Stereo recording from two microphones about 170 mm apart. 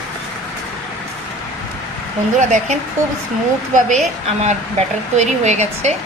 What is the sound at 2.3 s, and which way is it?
Speech, 45° right (ahead or behind).